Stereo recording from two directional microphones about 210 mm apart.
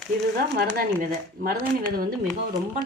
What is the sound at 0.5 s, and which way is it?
Speech, 45° right (ahead or behind).